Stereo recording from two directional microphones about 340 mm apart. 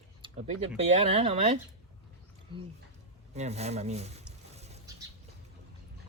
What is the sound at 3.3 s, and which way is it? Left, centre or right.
Speech, centre.